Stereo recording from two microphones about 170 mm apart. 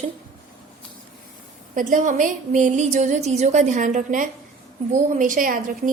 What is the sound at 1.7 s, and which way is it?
A woman's voice, 50° right (ahead or behind).